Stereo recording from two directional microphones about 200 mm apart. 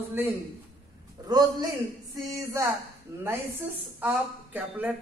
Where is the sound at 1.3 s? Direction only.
20° right (ahead or behind).